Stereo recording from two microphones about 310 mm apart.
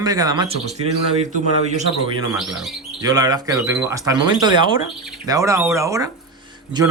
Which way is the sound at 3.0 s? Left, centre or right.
Centre.